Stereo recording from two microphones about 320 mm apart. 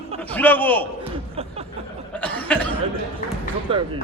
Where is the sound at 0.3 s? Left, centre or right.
Centre.